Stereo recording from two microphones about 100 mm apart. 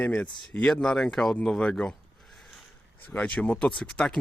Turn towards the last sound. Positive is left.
turn(degrees=5)  # may be behind; listen again after turning